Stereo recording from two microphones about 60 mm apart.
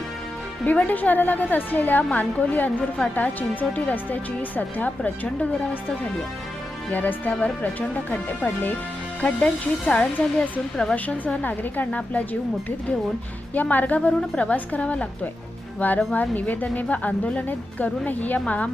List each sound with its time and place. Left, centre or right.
0.6 s speech: left
6.9 s speech: left
13.5 s speech: left
14.1 s a woman's voice: centre